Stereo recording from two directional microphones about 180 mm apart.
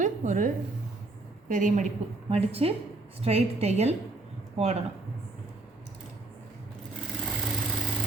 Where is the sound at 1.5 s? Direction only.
45° right (ahead or behind).